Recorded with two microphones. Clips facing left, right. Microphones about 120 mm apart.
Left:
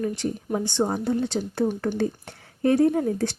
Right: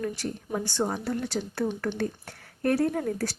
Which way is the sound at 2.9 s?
20° left (ahead or behind).